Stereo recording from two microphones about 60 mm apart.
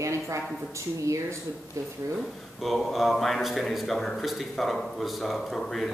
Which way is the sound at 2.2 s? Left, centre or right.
Centre.